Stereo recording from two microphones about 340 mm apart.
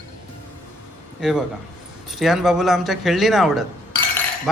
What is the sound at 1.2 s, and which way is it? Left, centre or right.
Speech, centre.